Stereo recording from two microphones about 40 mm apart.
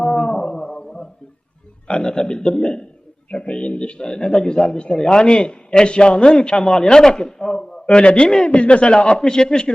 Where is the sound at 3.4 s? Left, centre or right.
Left.